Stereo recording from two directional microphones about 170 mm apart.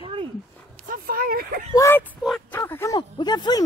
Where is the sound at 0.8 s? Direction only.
60° right (ahead or behind).